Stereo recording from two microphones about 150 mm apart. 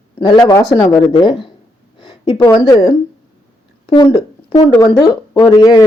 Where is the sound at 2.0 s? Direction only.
35° left (ahead or behind).